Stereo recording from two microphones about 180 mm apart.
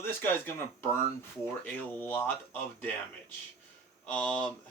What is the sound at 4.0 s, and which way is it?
Speech, 5° left (ahead or behind).